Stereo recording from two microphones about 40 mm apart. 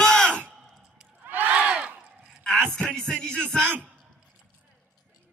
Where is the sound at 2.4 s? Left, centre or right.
Centre.